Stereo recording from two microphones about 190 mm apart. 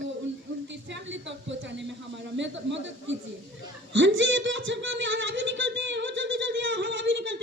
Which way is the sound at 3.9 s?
75° right (ahead or behind).